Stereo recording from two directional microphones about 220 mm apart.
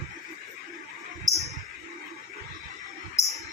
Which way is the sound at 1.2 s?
Centre (ahead or behind).